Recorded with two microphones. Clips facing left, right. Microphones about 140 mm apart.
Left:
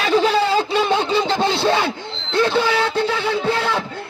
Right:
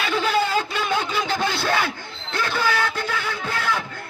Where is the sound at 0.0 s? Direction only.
35° left (ahead or behind).